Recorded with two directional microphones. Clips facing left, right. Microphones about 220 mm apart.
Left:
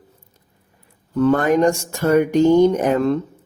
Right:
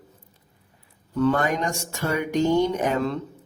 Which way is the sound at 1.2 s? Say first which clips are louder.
Left 7 dB; 45° left (ahead or behind).